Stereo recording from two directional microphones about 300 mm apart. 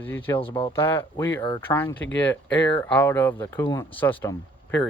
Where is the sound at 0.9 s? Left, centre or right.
Centre.